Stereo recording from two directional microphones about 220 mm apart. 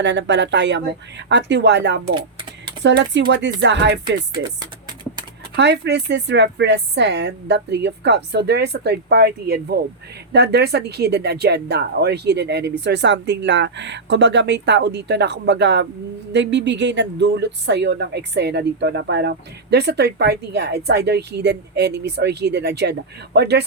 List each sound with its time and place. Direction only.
0.0 s speech: 55° right (ahead or behind)
5.5 s speech: 50° right (ahead or behind)